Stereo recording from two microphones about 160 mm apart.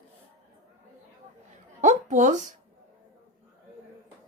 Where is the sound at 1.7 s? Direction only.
50° right (ahead or behind).